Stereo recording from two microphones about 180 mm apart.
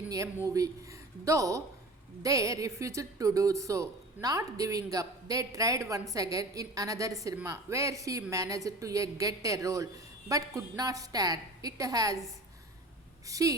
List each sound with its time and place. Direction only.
0.4 s speech: 20° right (ahead or behind)
13.2 s speech: 20° right (ahead or behind)